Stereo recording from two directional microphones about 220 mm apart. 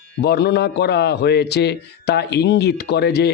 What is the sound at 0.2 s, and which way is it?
A man's voice, 45° left (ahead or behind).